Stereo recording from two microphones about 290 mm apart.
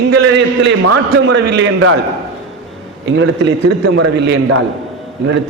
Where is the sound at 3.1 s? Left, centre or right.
Right.